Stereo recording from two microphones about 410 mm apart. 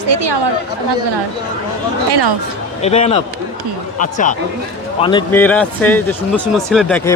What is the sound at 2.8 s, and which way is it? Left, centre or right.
Speech, centre.